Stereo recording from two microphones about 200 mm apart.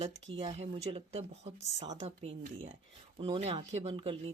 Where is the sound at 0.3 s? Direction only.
30° right (ahead or behind).